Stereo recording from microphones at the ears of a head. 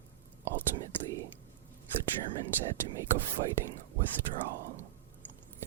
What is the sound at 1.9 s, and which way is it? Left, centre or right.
Speech, right.